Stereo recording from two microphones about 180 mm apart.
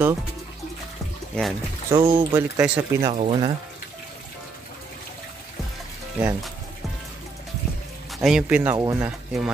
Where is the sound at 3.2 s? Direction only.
30° right (ahead or behind).